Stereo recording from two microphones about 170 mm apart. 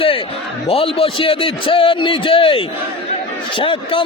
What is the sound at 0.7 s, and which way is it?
A man's voice, 35° left (ahead or behind).